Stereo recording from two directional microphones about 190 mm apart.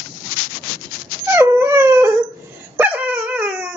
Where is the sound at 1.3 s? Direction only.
15° right (ahead or behind).